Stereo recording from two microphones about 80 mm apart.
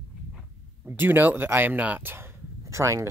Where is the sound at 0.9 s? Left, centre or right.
Right.